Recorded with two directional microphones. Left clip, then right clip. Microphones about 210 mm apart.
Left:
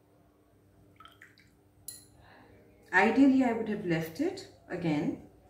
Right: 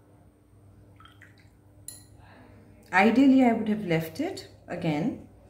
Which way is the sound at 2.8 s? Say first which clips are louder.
Right 3 dB; 45° right (ahead or behind).